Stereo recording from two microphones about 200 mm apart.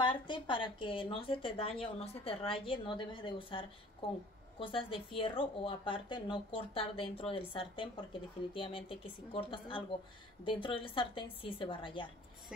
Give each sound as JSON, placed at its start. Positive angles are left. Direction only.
{"t": 0.0, "sound": "a woman's voice", "side_deg": 25}